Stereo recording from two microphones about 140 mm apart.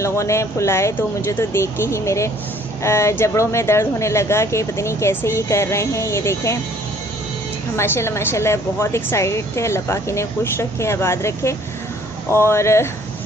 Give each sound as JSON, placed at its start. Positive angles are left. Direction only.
{"t": 0.0, "sound": "speech", "side_deg": 20}
{"t": 7.7, "sound": "speech", "side_deg": 20}